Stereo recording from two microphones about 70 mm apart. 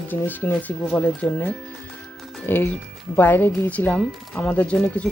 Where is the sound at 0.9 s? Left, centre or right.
Centre.